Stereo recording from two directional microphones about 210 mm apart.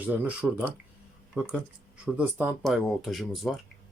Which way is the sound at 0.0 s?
10° right (ahead or behind).